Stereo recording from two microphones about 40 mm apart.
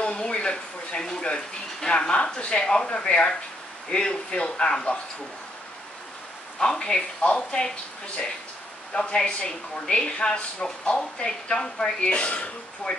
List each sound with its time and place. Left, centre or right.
0.0 s speech: left
6.6 s speech: left
8.9 s speech: left